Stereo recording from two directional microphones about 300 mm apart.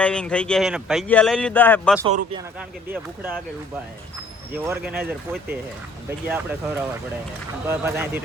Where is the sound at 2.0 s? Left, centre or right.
Centre.